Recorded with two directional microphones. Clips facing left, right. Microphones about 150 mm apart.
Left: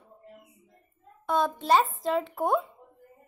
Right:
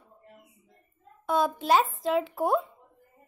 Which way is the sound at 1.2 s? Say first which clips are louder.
Right 1 dB; centre (ahead or behind).